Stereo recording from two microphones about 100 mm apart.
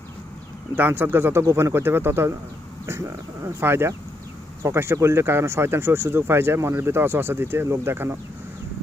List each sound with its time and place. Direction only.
0.8 s speech: 20° right (ahead or behind)